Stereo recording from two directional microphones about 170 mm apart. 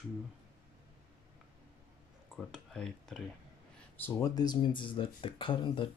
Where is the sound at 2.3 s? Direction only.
Centre (ahead or behind).